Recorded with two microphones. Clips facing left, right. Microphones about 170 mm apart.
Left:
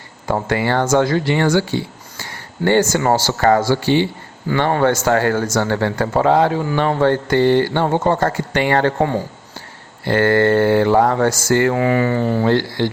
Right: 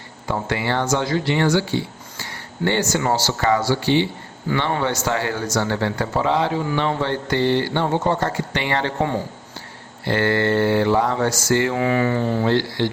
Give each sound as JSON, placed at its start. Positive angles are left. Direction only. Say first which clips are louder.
{"t": 0.3, "sound": "speech", "louder": "left 5 dB", "side_deg": 45}
{"t": 10.1, "sound": "speech", "louder": "left 5 dB", "side_deg": 50}